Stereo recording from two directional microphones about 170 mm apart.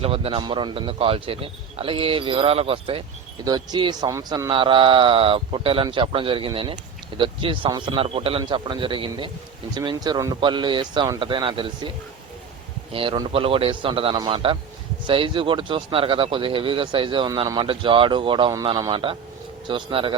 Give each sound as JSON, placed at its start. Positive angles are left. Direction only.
{"t": 0.0, "sound": "a man's voice", "side_deg": -35}
{"t": 12.9, "sound": "a man's voice", "side_deg": -30}